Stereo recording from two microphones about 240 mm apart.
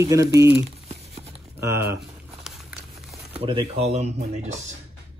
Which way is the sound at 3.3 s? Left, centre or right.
Right.